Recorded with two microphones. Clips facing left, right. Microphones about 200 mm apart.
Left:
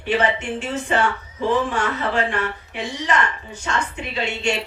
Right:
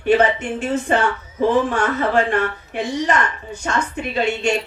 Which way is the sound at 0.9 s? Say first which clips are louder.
Right 2 dB; 50° right (ahead or behind).